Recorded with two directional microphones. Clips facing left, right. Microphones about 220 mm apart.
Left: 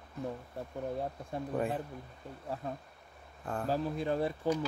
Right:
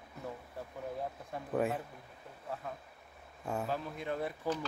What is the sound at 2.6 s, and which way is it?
Speech, 35° left (ahead or behind).